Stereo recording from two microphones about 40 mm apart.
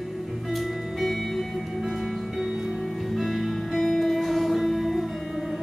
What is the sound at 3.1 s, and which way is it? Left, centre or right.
Music, centre.